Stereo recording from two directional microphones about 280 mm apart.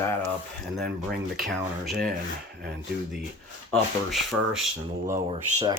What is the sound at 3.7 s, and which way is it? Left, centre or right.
Speech, centre.